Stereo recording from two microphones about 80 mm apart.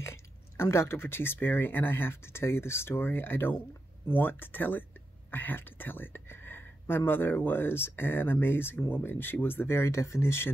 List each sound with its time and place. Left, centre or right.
0.0 s speech: left